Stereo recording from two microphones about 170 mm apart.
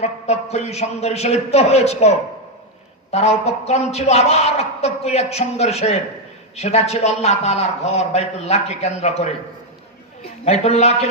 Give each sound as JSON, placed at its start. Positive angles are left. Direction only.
{"t": 0.0, "sound": "a man's voice", "side_deg": 40}
{"t": 10.4, "sound": "a man's voice", "side_deg": 40}